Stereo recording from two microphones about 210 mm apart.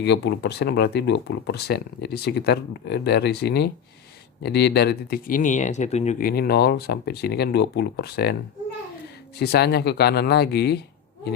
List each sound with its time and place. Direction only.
0.0 s speech: 55° left (ahead or behind)
9.4 s speech: 50° left (ahead or behind)